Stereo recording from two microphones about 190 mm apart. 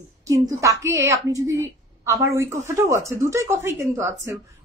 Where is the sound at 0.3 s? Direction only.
15° right (ahead or behind).